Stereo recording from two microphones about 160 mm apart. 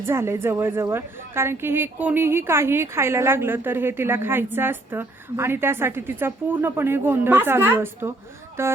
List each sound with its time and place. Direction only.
0.0 s speech: 15° right (ahead or behind)